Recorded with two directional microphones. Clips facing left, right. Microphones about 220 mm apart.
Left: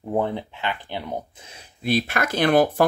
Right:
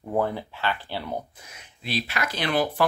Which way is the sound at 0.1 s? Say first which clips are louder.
Left 2 dB; 20° left (ahead or behind).